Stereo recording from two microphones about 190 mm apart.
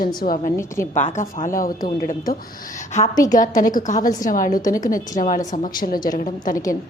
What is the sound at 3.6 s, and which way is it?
A woman's voice, 45° left (ahead or behind).